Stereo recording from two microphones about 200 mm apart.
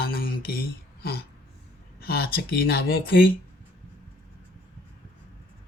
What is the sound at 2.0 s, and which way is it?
Speech, 50° left (ahead or behind).